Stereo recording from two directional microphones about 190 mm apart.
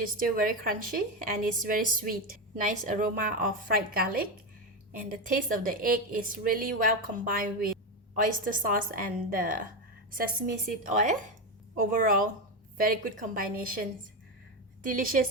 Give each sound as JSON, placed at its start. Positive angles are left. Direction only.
{"t": 0.0, "sound": "a woman's voice", "side_deg": -45}
{"t": 14.8, "sound": "a woman's voice", "side_deg": -45}